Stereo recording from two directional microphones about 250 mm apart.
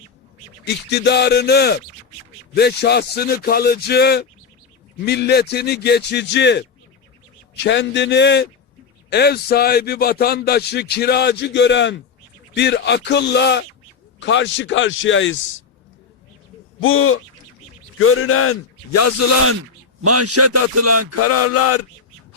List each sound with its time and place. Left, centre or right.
0.6 s a man's voice: left
16.8 s a man's voice: left
18.9 s speech: left
20.0 s a man's voice: right
21.2 s a sound: left